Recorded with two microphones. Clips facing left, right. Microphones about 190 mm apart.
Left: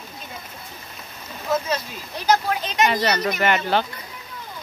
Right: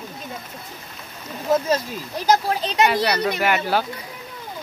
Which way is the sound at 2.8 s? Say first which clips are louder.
Even; 5° right (ahead or behind).